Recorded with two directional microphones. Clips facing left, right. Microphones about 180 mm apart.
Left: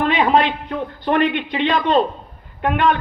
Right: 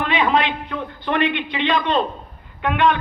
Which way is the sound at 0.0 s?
45° left (ahead or behind).